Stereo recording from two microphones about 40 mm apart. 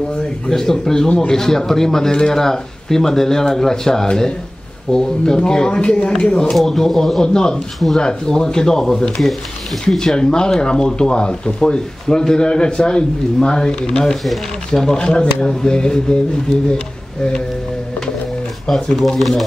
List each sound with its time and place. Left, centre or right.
0.5 s speech: centre
6.5 s speech: centre
9.8 s speech: centre
18.7 s speech: centre